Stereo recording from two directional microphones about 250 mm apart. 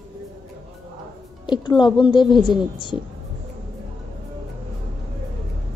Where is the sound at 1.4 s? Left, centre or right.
Centre.